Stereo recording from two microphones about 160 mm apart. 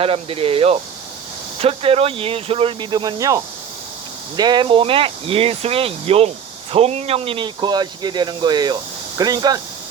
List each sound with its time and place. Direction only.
0.0 s speech: 35° right (ahead or behind)